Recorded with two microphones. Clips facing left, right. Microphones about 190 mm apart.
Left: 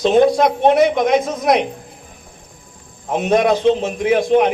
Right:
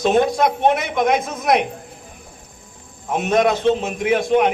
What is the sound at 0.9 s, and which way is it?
Speech, 50° right (ahead or behind).